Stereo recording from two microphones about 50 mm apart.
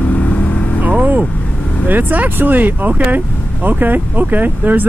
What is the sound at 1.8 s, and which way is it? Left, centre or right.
Speech, right.